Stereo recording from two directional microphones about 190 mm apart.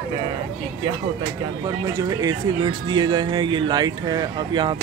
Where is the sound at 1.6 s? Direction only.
15° right (ahead or behind).